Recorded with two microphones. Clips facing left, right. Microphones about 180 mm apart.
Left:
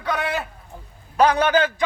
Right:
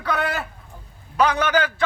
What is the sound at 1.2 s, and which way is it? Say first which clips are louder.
Speech: left 3 dB; 35° left (ahead or behind).